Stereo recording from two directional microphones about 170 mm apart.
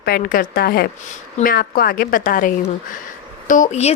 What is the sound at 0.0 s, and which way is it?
A woman's voice, 60° left (ahead or behind).